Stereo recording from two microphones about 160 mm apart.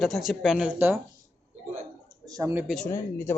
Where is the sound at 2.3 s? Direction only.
15° right (ahead or behind).